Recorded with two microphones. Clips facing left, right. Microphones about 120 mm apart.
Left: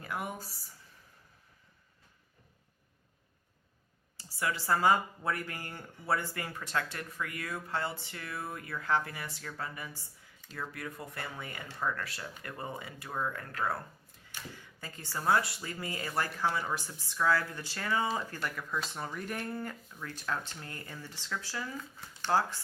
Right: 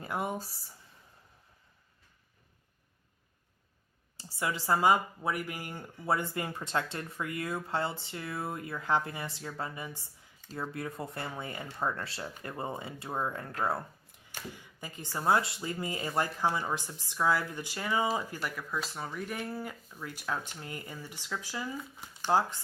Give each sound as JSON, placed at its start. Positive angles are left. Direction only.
{"t": 0.0, "sound": "speech", "side_deg": -25}
{"t": 4.2, "sound": "speech", "side_deg": -20}
{"t": 14.5, "sound": "speech", "side_deg": -15}